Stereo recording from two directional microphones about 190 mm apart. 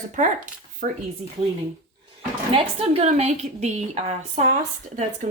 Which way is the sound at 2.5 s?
30° right (ahead or behind).